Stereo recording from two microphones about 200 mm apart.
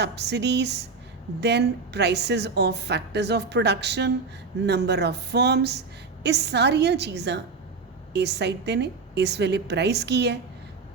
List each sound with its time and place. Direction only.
0.0 s a woman's voice: 55° right (ahead or behind)